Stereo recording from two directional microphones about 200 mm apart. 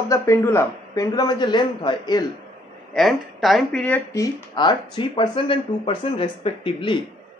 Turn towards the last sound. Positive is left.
turn(degrees=25)  # may be behind; listen again after turning